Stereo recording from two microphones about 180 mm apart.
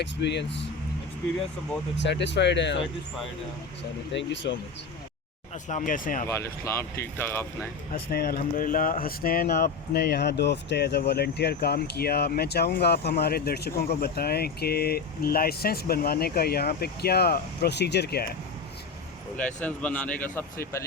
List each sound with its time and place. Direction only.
0.0 s speech: 75° left (ahead or behind)
2.0 s speech: 80° left
4.1 s speech: 80° left
5.6 s speech: 45° left (ahead or behind)
6.2 s speech: 15° left (ahead or behind)
8.1 s speech: 55° left (ahead or behind)
19.6 s speech: 10° left (ahead or behind)